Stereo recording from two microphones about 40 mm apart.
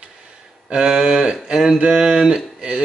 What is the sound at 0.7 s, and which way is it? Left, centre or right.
Speech, right.